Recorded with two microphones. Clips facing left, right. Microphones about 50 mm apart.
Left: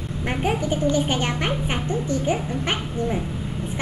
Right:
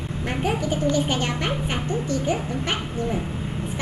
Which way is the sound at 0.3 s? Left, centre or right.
Left.